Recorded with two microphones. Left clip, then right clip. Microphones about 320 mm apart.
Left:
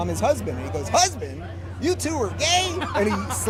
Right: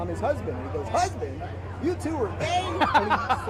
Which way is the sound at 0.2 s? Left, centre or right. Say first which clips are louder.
Left 5 dB; left.